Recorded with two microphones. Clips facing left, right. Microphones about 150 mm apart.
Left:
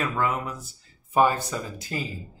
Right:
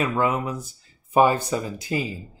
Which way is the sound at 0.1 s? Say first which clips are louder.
Right 4 dB; 20° right (ahead or behind).